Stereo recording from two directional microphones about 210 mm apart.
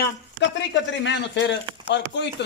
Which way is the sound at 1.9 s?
55° left (ahead or behind).